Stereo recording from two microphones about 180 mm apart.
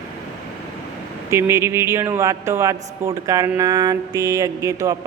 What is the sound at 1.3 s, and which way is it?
A man's voice, 15° right (ahead or behind).